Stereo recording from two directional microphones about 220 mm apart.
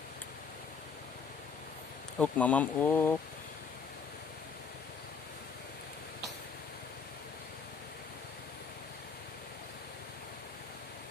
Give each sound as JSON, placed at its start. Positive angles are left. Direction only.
{"t": 2.1, "sound": "speech", "side_deg": 5}